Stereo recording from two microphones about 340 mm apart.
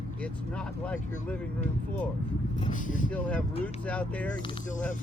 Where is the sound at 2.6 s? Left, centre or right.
Left.